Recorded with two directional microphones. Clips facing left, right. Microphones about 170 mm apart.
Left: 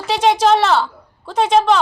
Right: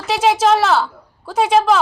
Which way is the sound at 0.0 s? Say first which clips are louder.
Even; centre (ahead or behind).